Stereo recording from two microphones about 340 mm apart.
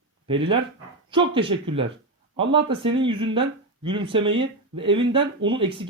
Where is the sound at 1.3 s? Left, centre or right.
Centre.